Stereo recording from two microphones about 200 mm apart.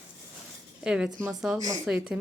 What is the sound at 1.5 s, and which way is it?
Speech, 15° right (ahead or behind).